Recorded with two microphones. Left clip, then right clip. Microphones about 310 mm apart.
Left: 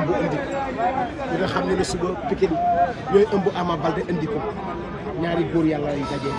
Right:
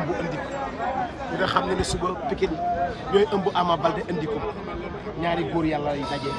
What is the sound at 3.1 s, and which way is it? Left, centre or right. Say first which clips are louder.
Speech: left 1 dB; right.